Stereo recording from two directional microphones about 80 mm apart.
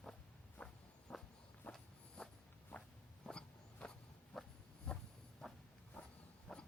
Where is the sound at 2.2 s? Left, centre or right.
Centre.